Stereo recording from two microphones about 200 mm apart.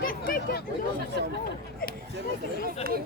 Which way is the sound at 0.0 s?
45° left (ahead or behind).